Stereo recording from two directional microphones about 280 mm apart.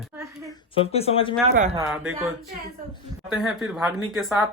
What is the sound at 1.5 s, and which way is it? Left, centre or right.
Speech, right.